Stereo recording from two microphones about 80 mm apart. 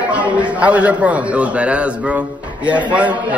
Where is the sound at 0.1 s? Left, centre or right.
Centre.